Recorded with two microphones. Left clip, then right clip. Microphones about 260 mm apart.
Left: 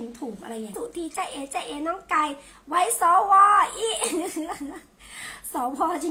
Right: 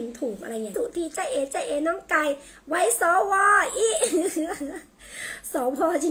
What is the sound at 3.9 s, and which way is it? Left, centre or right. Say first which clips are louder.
Speech: right 3 dB; centre.